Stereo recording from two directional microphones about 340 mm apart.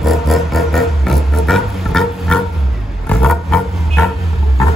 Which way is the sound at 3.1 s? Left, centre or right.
Centre.